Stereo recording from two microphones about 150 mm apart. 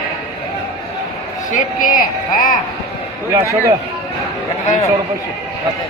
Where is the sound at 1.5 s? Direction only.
60° left (ahead or behind).